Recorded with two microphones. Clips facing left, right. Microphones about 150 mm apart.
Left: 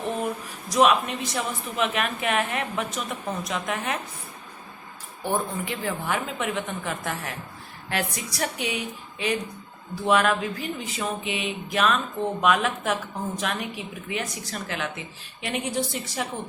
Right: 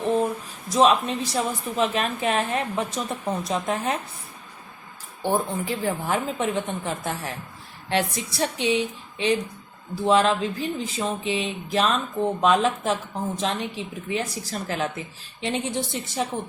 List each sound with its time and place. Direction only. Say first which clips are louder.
0.0 s a sound: right 6 dB; 30° right (ahead or behind)
0.7 s a woman's voice: right 1 dB; 30° right (ahead or behind)
5.2 s a woman's voice: right 3 dB; 30° right (ahead or behind)